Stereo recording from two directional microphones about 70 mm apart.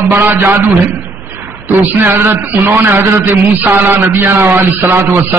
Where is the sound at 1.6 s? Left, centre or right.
Right.